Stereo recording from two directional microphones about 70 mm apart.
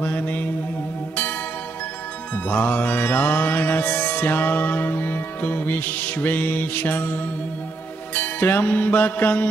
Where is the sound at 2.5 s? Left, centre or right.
Left.